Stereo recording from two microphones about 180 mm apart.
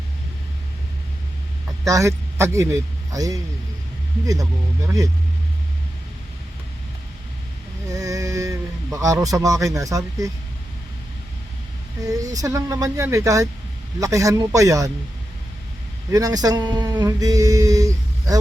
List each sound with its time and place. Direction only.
1.9 s speech: 15° right (ahead or behind)
7.9 s speech: 20° right (ahead or behind)
12.0 s speech: 20° right (ahead or behind)
16.0 s speech: 20° right (ahead or behind)